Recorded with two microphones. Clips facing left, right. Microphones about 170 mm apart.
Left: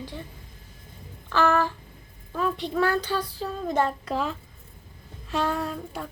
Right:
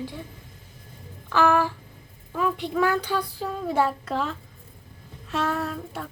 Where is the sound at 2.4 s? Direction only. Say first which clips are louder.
Right 1 dB; 10° right (ahead or behind).